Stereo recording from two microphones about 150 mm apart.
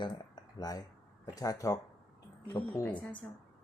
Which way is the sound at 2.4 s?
15° left (ahead or behind).